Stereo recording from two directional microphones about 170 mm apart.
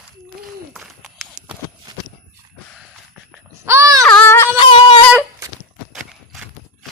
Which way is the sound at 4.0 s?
10° left (ahead or behind).